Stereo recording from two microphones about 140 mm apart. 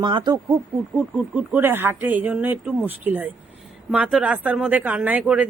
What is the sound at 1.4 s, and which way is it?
Speech, 15° right (ahead or behind).